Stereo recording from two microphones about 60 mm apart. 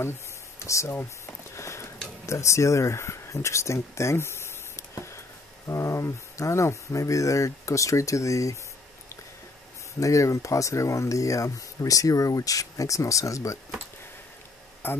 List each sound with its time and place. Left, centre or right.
0.7 s speech: left
0.9 s a sound: left
2.2 s speech: left
9.9 s speech: left
14.8 s speech: left